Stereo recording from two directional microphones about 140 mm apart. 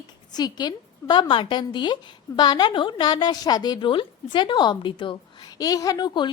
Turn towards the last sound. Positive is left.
turn(degrees=30)  # may be behind; listen again after turning